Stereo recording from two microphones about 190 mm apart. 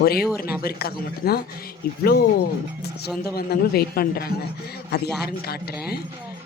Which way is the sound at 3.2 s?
55° left (ahead or behind).